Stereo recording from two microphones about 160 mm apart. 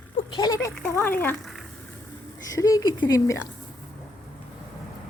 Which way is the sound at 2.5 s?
20° left (ahead or behind).